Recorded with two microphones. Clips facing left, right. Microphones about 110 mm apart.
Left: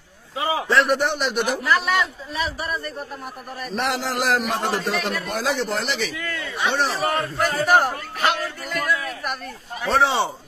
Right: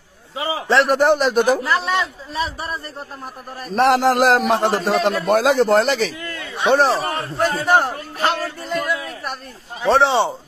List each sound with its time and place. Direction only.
0.5 s a man's voice: 30° right (ahead or behind)
5.2 s a man's voice: 55° right (ahead or behind); by 10.3 s 25° right (ahead or behind)